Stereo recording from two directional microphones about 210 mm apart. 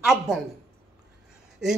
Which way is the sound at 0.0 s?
5° right (ahead or behind).